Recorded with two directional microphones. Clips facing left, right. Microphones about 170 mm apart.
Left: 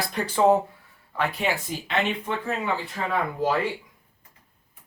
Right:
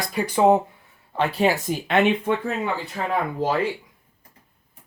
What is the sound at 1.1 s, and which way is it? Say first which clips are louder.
Speech: right 5 dB; 35° right (ahead or behind).